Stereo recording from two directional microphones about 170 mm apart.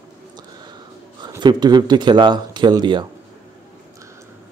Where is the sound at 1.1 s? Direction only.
25° right (ahead or behind).